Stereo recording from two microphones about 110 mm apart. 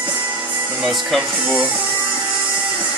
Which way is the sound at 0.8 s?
Centre (ahead or behind).